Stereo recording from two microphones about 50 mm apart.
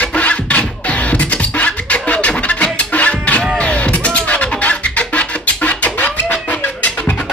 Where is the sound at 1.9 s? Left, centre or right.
Left.